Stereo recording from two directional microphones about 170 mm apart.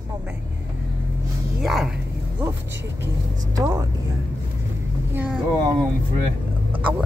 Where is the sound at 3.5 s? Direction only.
20° right (ahead or behind).